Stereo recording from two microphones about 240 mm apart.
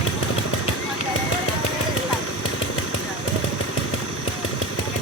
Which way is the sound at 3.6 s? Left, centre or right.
Left.